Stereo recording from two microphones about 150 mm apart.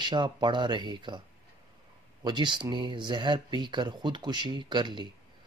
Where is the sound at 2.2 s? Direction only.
30° right (ahead or behind).